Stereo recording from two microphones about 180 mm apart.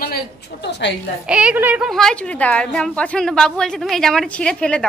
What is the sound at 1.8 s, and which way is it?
A woman's voice, 5° left (ahead or behind).